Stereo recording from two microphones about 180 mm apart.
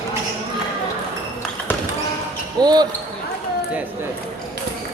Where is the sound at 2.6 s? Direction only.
20° right (ahead or behind).